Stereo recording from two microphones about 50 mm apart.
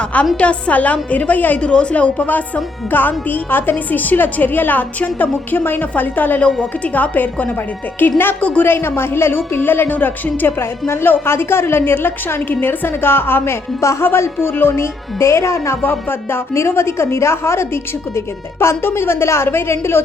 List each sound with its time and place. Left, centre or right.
0.3 s a woman's voice: left
1.7 s a woman's voice: left
8.4 s a woman's voice: left
8.6 s a woman's voice: left
9.3 s a woman's voice: left
14.8 s speech: left
15.8 s a woman's voice: left
18.6 s a woman's voice: left